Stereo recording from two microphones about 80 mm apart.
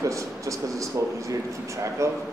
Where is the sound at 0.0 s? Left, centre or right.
Right.